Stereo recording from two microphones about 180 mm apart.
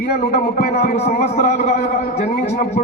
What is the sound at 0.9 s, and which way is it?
A man's voice, 45° left (ahead or behind).